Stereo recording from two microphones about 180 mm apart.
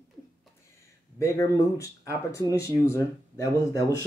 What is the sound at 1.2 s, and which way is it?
Speech, 15° left (ahead or behind).